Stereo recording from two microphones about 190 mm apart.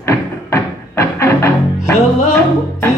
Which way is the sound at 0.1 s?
15° left (ahead or behind).